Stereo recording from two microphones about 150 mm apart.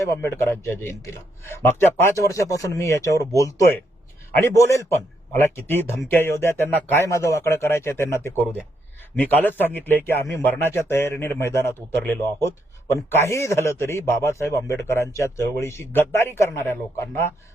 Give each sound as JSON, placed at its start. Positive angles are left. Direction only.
{"t": 0.0, "sound": "speech", "side_deg": 15}